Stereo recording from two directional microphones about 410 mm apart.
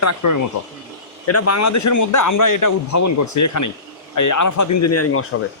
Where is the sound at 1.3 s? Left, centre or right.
Left.